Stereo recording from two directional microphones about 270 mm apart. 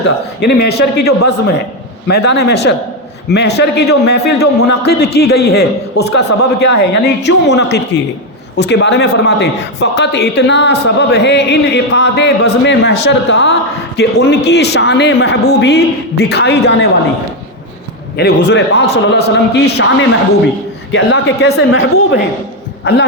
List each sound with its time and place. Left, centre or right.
0.4 s a man's voice: left
18.2 s a man's voice: left
20.9 s a woman's voice: left